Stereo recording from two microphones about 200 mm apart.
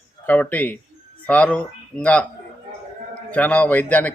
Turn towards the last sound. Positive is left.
turn(degrees=10)  # may be behind; listen again after turning